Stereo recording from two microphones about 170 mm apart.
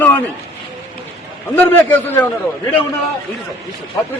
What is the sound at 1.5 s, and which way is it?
Speech, 10° left (ahead or behind).